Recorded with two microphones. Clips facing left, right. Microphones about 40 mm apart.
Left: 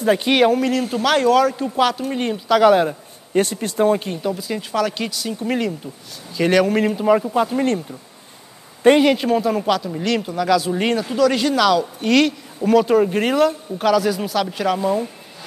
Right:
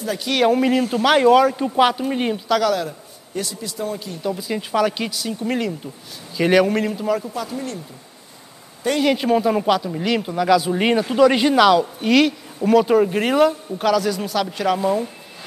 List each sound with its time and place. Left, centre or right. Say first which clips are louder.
0.0 s speech: left 8 dB; left
0.5 s a man's voice: right 1 dB; centre
2.6 s a man's voice: left 7 dB; left
4.4 s speech: right 1 dB; centre
6.8 s speech: left 4 dB; centre
7.1 s speech: left 7 dB; left
7.5 s speech: left 9 dB; left
9.0 s speech: left 1 dB; centre